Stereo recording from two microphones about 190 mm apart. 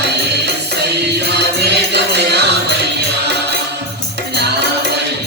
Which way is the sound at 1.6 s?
60° right (ahead or behind).